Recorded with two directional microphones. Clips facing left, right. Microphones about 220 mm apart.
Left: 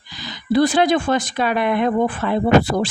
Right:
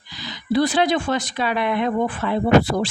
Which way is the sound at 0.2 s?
50° left (ahead or behind).